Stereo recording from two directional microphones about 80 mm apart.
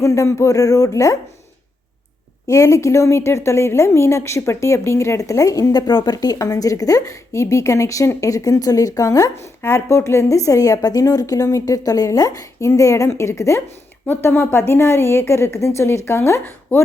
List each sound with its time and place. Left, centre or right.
0.0 s speech: left
2.5 s a woman's voice: left
14.1 s a woman's voice: left